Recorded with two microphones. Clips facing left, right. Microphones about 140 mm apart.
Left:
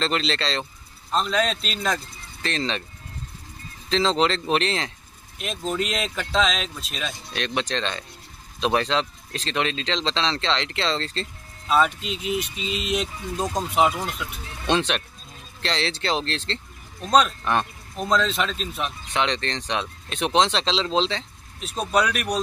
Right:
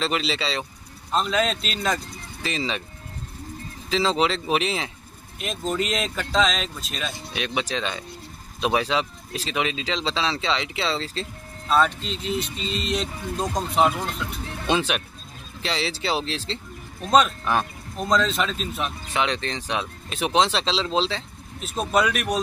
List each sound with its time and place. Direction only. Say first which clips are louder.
0.0 s speech: even; 5° right (ahead or behind)
3.9 s speech: left 1 dB; 5° right (ahead or behind)
11.6 s speech: even; 5° left (ahead or behind)
14.4 s speech: right 5 dB; 50° right (ahead or behind)
14.7 s speech: left 1 dB; 5° right (ahead or behind)